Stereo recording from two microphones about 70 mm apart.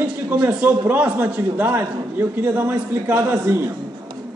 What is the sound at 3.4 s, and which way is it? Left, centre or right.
Speech, right.